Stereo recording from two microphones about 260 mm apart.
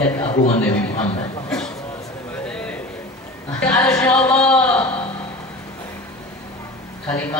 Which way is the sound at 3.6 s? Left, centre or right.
Centre.